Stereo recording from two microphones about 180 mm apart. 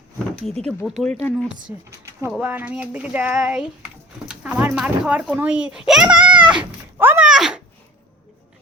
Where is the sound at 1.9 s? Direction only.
15° right (ahead or behind).